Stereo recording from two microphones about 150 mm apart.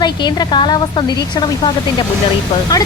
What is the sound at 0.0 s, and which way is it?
Speech, 30° left (ahead or behind).